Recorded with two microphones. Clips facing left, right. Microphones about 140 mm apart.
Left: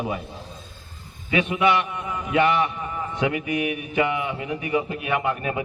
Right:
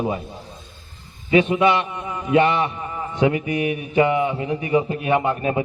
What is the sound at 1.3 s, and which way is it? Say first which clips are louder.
A man's voice: right 4 dB; 25° right (ahead or behind).